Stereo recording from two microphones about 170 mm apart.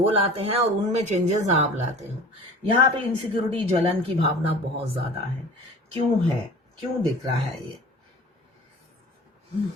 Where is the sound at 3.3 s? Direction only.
35° right (ahead or behind).